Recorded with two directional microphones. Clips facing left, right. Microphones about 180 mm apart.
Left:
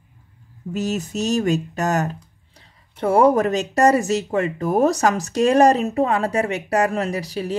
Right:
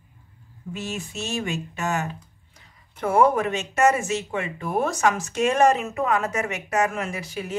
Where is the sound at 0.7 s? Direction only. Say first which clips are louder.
Left 8 dB; 40° left (ahead or behind).